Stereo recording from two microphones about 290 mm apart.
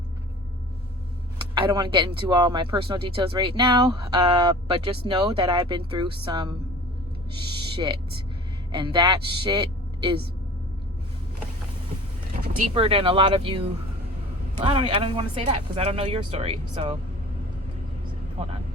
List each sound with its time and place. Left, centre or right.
1.5 s speech: centre
12.4 s speech: right
14.6 s speech: centre
18.4 s speech: right